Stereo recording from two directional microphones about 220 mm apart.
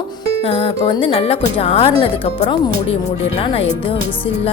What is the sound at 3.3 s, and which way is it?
Speech, 25° left (ahead or behind).